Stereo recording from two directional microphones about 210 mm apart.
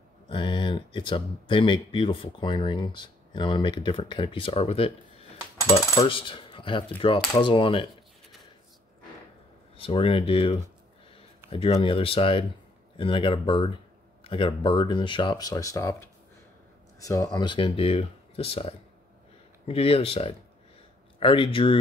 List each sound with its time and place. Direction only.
0.3 s speech: 25° left (ahead or behind)
9.8 s speech: 25° left (ahead or behind)